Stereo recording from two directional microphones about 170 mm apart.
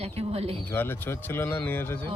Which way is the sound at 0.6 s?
10° left (ahead or behind).